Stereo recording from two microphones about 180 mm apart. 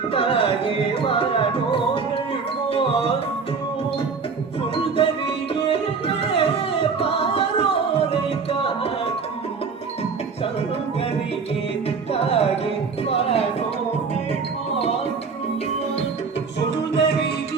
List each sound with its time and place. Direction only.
0.1 s music: 30° left (ahead or behind)
4.8 s music: 30° left (ahead or behind)
12.1 s music: 35° left (ahead or behind)
16.6 s music: 75° left (ahead or behind)